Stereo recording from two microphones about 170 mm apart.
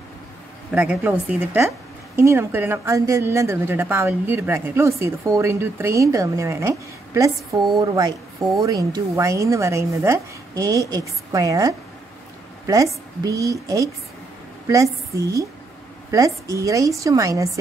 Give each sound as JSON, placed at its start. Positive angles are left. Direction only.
{"t": 0.7, "sound": "a woman's voice", "side_deg": -10}